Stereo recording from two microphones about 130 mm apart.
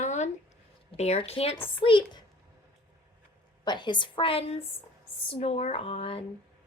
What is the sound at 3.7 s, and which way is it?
A woman's voice, 35° left (ahead or behind).